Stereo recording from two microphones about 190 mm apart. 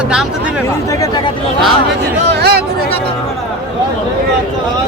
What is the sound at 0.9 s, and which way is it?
Speech, 20° left (ahead or behind).